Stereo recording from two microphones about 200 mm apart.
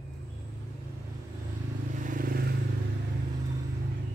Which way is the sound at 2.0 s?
45° right (ahead or behind).